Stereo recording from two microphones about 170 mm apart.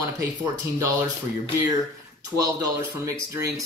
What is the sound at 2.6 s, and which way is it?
Speech, 20° right (ahead or behind).